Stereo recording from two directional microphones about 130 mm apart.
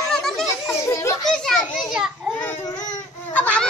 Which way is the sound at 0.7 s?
20° left (ahead or behind).